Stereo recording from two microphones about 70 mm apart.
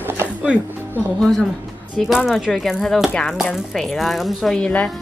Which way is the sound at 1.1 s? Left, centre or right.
Centre.